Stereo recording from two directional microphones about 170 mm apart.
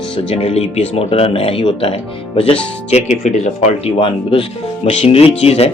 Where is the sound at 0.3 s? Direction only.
35° left (ahead or behind).